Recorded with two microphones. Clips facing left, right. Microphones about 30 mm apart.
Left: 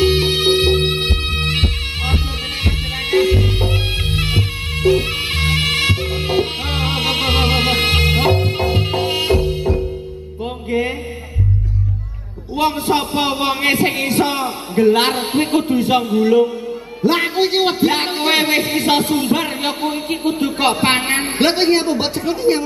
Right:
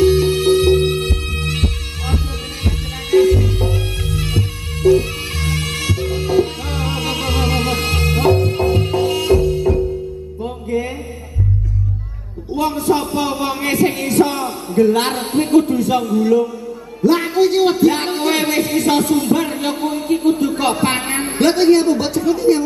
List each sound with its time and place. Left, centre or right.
0.0 s music: left
12.5 s a sound: left
17.0 s a man's voice: left